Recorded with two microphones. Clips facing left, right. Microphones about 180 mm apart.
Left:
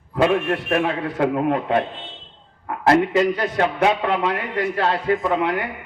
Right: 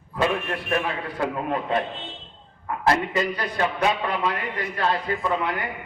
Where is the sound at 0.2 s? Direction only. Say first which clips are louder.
Left 6 dB; 55° left (ahead or behind); by 4.9 s 70° left (ahead or behind).